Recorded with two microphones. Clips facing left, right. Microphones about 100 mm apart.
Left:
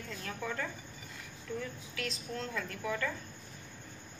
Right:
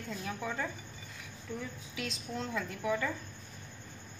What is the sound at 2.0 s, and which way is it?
A woman's voice, 15° right (ahead or behind).